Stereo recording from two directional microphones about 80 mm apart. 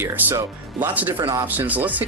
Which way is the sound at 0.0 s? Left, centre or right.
Right.